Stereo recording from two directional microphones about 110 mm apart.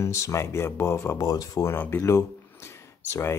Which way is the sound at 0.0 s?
25° left (ahead or behind).